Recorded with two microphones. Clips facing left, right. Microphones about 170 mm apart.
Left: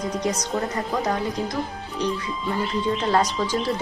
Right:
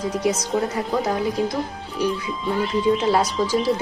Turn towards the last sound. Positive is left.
turn(degrees=-10)  # may be behind; listen again after turning